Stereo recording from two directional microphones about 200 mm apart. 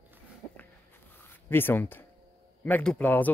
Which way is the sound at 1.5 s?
10° left (ahead or behind).